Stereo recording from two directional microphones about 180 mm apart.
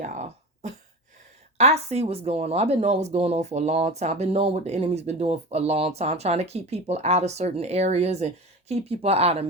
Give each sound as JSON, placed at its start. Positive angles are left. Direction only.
{"t": 0.0, "sound": "throat clearing", "side_deg": -40}
{"t": 1.5, "sound": "speech", "side_deg": -35}